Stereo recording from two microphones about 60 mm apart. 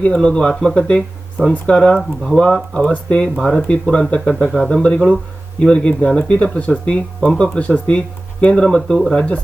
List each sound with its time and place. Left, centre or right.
0.0 s speech: centre